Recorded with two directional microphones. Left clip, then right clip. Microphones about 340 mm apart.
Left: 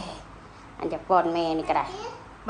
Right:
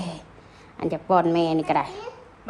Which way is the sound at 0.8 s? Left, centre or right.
Right.